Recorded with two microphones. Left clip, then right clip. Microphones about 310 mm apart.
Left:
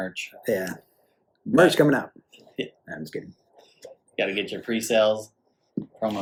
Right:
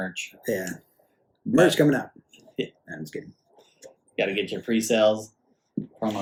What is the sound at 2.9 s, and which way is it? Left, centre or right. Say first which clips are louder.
Speech: left 2 dB; left.